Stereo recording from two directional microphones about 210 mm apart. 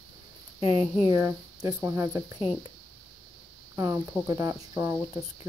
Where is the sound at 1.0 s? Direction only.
15° right (ahead or behind).